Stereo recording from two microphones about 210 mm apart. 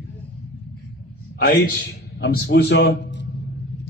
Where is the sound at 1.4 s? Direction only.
45° left (ahead or behind).